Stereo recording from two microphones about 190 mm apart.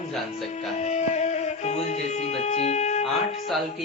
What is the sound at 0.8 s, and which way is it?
Speech, 35° left (ahead or behind).